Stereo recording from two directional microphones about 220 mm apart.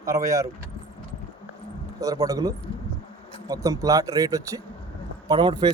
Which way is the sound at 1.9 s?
15° right (ahead or behind).